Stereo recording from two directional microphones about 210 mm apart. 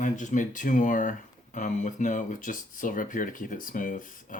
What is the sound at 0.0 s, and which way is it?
Speech, 35° left (ahead or behind).